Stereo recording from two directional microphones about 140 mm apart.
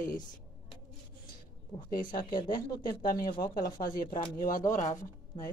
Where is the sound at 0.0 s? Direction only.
80° left.